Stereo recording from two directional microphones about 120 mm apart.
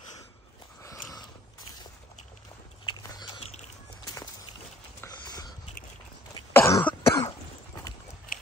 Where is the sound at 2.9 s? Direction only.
35° left (ahead or behind).